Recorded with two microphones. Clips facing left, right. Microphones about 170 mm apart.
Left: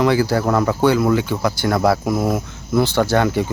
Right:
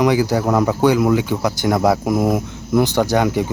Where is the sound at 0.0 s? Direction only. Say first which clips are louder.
Even; 15° right (ahead or behind).